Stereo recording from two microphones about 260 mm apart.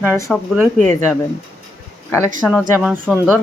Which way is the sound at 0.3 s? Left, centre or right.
Centre.